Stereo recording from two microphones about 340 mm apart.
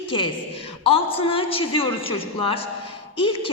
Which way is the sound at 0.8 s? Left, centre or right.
Centre.